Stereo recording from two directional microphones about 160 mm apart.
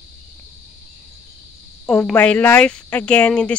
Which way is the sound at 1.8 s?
5° left (ahead or behind).